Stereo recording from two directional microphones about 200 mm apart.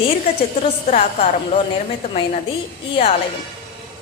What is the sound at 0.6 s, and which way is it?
A woman's voice, 30° left (ahead or behind).